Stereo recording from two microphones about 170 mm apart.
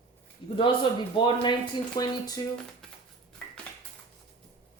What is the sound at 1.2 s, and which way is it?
Speech, 25° left (ahead or behind).